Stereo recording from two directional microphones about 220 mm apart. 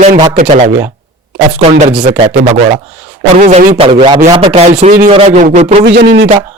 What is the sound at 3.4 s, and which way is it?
A man's voice, 35° right (ahead or behind).